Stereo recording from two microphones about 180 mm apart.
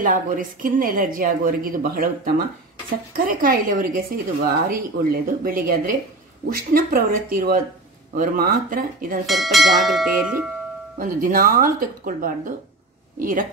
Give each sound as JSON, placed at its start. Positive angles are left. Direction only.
{"t": 0.0, "sound": "a woman's voice", "side_deg": -50}
{"t": 9.2, "sound": "speech", "side_deg": 0}
{"t": 11.0, "sound": "a woman's voice", "side_deg": -50}